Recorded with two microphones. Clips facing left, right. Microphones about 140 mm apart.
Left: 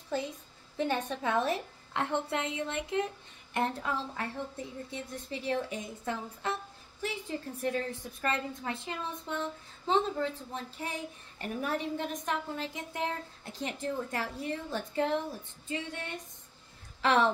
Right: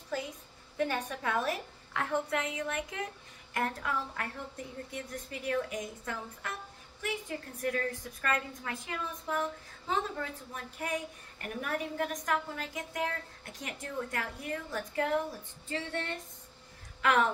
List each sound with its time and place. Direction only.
0.7 s a woman's voice: 25° left (ahead or behind)
15.7 s speech: 15° left (ahead or behind)
17.0 s speech: 30° left (ahead or behind)